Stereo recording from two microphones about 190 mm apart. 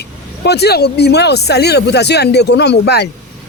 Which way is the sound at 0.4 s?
60° left (ahead or behind).